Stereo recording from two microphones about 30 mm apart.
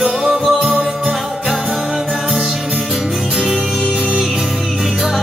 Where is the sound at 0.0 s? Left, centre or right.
Centre.